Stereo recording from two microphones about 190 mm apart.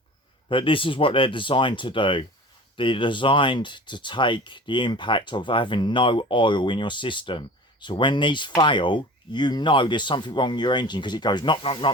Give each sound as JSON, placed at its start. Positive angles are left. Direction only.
{"t": 0.4, "sound": "speech", "side_deg": 25}